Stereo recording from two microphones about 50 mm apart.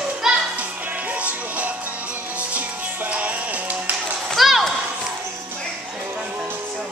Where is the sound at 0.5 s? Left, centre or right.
Right.